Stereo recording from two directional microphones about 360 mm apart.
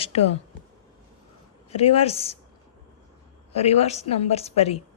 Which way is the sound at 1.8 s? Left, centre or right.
Centre.